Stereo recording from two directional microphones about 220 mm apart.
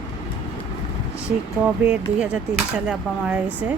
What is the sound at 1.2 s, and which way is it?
Speech, 5° right (ahead or behind).